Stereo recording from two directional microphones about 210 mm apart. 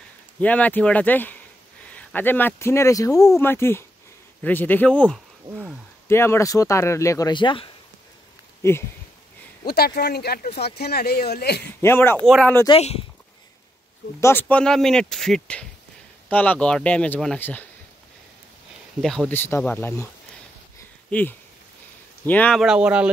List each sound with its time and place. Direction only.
0.4 s speech: 5° left (ahead or behind)
5.5 s speech: 10° right (ahead or behind)
6.0 s speech: 10° left (ahead or behind)
8.6 s speech: 15° left (ahead or behind)
9.7 s speech: 50° left (ahead or behind)
11.8 s speech: 10° left (ahead or behind)
12.6 s speech: 25° left (ahead or behind)
14.2 s speech: 10° left (ahead or behind)
18.9 s speech: centre (ahead or behind)
21.1 s speech: 10° left (ahead or behind)